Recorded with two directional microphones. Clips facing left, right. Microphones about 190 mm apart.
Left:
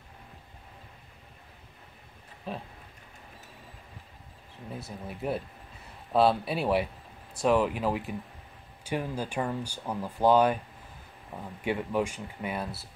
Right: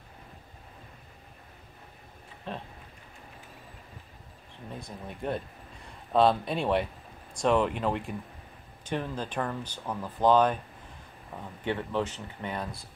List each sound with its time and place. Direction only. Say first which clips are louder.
2.5 s speech: left 1 dB; 5° left (ahead or behind)
4.6 s speech: left 1 dB; 5° left (ahead or behind)
11.6 s speech: left 1 dB; 10° left (ahead or behind)